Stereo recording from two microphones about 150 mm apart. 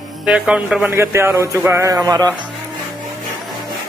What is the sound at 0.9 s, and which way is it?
Speech, 20° right (ahead or behind).